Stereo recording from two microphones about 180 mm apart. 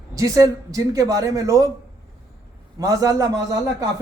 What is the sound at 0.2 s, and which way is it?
A man's voice, 20° right (ahead or behind).